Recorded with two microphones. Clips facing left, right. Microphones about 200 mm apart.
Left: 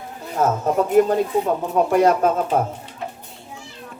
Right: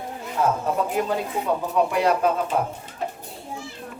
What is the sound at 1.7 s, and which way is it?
Speech, 45° left (ahead or behind).